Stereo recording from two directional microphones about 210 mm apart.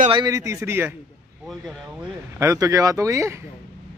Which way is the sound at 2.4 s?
15° right (ahead or behind).